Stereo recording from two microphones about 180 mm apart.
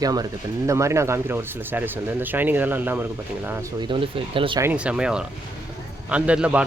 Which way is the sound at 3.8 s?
30° right (ahead or behind).